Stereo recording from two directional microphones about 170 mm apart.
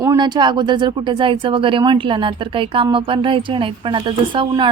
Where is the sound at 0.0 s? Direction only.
20° right (ahead or behind).